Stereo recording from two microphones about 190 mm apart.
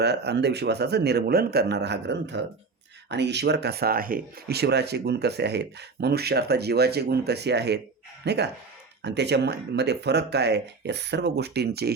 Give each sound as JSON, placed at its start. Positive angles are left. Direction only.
{"t": 0.0, "sound": "a man's voice", "side_deg": -60}